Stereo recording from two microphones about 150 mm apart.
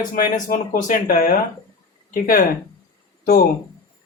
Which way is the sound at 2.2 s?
75° left (ahead or behind).